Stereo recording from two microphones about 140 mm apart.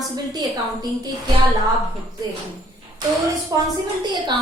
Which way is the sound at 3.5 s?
25° right (ahead or behind).